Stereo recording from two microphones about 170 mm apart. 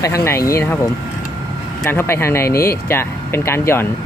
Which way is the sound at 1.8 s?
15° left (ahead or behind).